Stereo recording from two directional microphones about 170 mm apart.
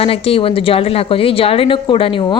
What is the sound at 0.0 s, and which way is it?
Speech, 35° left (ahead or behind).